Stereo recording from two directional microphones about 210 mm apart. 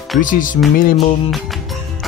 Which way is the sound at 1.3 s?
Centre (ahead or behind).